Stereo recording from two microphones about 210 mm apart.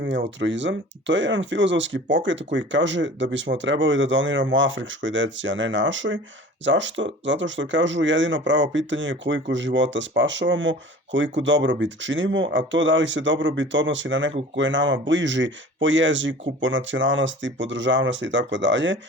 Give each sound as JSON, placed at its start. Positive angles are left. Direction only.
{"t": 0.3, "sound": "speech", "side_deg": -60}